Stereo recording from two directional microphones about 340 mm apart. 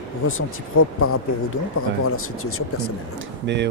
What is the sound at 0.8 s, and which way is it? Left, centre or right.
Speech, left.